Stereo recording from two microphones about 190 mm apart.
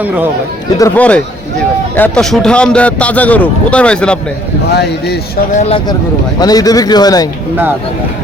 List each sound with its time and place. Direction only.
0.8 s a man's voice: 10° left (ahead or behind)
4.7 s speech: 60° left (ahead or behind)
5.5 s speech: 30° left (ahead or behind)
6.4 s speech: 20° left (ahead or behind)